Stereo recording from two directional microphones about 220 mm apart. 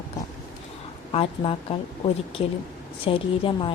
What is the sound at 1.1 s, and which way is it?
Speech, 25° left (ahead or behind).